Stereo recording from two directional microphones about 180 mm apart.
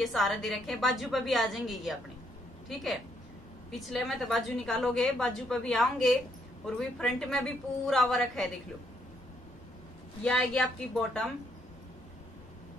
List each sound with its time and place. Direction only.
0.0 s a woman's voice: centre (ahead or behind)
3.8 s a woman's voice: centre (ahead or behind)
10.2 s a woman's voice: 5° left (ahead or behind)